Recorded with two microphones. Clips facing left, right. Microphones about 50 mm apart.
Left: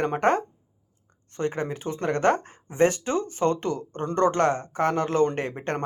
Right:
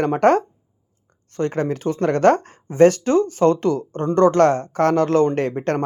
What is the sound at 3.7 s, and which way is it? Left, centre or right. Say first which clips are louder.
Speech: right 8 dB; right.